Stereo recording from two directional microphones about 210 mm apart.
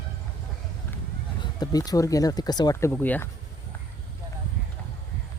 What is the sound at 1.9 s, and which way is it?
Speech, 15° left (ahead or behind).